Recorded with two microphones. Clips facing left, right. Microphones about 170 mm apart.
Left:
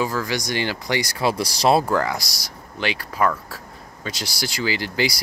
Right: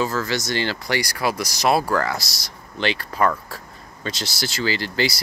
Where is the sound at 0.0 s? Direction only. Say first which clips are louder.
Right 1 dB; 15° left (ahead or behind).